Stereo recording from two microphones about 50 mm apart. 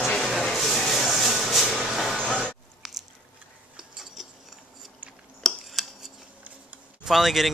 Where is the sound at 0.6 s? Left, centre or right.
Centre.